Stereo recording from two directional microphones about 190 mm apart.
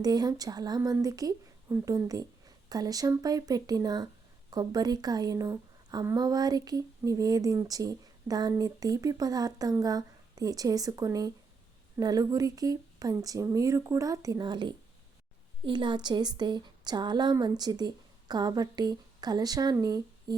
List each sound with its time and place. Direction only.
0.0 s a woman's voice: 20° right (ahead or behind)